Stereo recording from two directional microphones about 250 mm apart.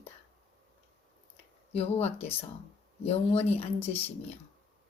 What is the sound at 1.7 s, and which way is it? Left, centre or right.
Speech, left.